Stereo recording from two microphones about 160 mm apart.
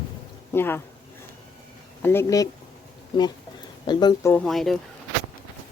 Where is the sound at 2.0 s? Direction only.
15° left (ahead or behind).